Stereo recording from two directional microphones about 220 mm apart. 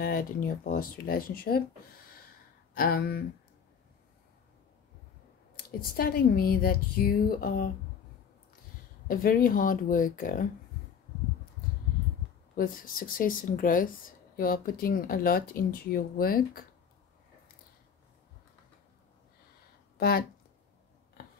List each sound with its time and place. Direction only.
0.0 s speech: 40° left (ahead or behind)
5.6 s speech: 40° left (ahead or behind)
9.0 s speech: 40° left (ahead or behind)
12.5 s speech: 40° left (ahead or behind)
20.0 s speech: 45° left (ahead or behind)